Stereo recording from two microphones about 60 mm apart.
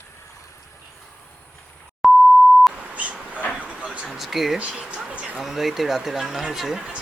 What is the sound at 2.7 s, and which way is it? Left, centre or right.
Beep, right.